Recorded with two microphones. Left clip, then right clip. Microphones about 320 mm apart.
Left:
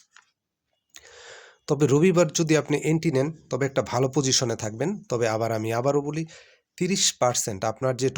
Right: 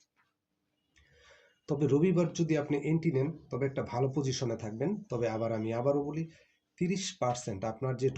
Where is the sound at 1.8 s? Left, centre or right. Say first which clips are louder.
Left 9 dB; left.